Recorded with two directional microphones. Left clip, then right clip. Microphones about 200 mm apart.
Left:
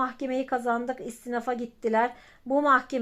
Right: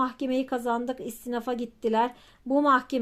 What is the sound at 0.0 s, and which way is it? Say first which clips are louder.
Speech: right 1 dB; 25° right (ahead or behind).